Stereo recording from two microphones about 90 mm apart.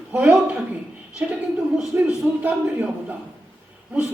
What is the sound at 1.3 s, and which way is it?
Speech, 5° right (ahead or behind).